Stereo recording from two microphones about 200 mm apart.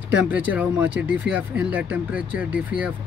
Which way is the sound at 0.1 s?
10° right (ahead or behind).